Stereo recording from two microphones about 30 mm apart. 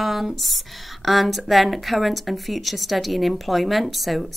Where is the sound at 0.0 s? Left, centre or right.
Centre.